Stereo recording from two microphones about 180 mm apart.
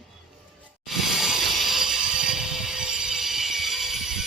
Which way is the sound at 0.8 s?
Centre (ahead or behind).